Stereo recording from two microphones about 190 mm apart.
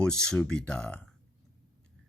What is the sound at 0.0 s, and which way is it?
Speech, 5° left (ahead or behind).